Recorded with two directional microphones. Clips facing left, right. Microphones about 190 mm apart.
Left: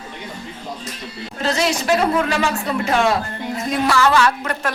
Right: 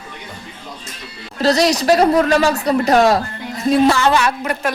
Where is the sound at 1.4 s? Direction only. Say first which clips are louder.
Right 6 dB; 40° right (ahead or behind).